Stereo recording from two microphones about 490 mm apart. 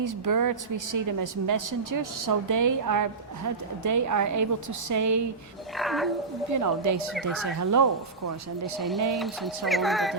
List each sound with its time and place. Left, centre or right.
0.0 s a woman's voice: right
5.7 s speech: centre
6.5 s a woman's voice: right
7.1 s speech: centre
7.6 s a woman's voice: right
8.8 s speech: centre